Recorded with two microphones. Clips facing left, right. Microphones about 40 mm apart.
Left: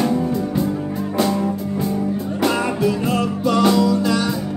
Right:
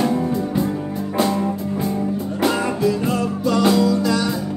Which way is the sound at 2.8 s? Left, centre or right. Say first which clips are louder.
Even; left.